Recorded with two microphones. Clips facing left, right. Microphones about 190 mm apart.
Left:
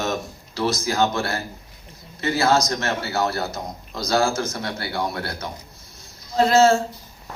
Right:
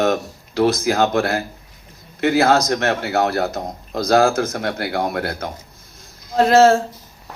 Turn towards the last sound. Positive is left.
turn(degrees=-55)  # may be behind; listen again after turning